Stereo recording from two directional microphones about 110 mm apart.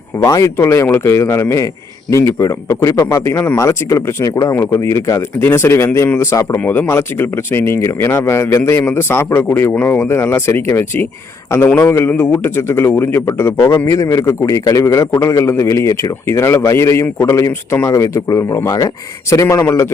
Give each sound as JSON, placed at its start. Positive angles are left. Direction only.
{"t": 0.2, "sound": "a man's voice", "side_deg": 30}
{"t": 3.0, "sound": "speech", "side_deg": 40}
{"t": 3.2, "sound": "a man's voice", "side_deg": 25}
{"t": 6.6, "sound": "a man's voice", "side_deg": 15}